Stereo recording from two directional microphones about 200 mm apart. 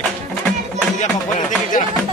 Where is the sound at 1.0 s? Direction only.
40° left (ahead or behind).